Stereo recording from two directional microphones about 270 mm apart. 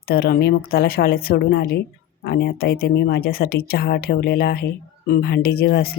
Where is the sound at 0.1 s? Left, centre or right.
Left.